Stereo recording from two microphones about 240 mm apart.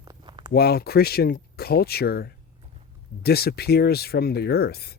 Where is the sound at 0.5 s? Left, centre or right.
Left.